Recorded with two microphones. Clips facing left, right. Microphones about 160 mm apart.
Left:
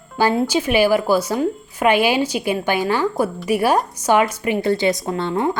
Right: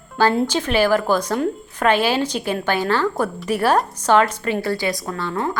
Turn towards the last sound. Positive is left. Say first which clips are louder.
# left 4 dB
turn(degrees=25)  # may be behind; listen again after turning